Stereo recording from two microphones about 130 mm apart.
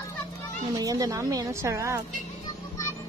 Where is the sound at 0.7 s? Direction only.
25° right (ahead or behind).